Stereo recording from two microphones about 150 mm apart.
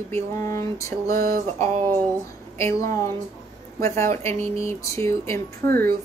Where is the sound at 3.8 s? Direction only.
20° left (ahead or behind).